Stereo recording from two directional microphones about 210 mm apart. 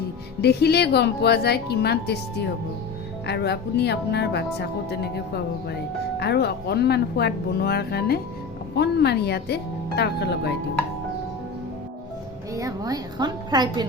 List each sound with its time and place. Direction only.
0.4 s speech: 50° left (ahead or behind)
3.2 s speech: 50° left (ahead or behind)
12.5 s a woman's voice: 15° right (ahead or behind)